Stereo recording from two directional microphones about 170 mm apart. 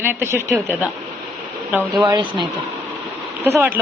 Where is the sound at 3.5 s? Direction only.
15° right (ahead or behind).